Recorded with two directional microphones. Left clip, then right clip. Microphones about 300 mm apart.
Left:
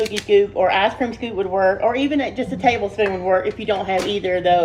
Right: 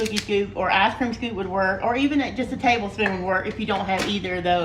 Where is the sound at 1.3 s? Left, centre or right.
Right.